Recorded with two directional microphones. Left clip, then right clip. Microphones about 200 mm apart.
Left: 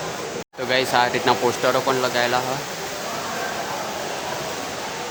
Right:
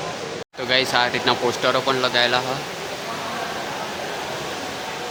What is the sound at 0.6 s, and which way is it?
Speech, 5° left (ahead or behind).